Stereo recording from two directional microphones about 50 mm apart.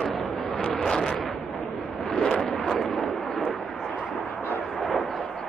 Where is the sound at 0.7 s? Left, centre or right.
Centre.